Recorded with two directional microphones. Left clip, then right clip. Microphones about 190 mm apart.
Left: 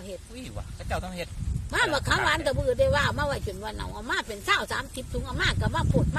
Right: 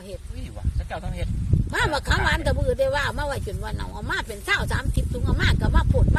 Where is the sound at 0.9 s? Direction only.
55° left (ahead or behind).